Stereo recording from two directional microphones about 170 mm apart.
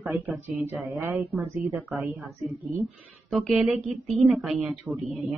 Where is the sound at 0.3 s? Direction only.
10° right (ahead or behind).